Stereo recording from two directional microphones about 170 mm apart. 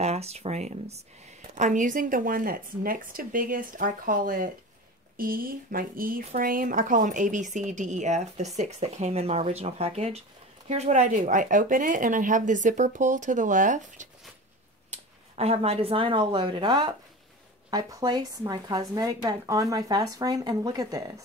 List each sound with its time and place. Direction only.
0.0 s a woman's voice: 40° right (ahead or behind); by 21.0 s 20° right (ahead or behind)